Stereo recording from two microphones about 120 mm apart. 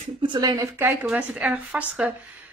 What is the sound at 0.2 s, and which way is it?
Speech, 35° right (ahead or behind).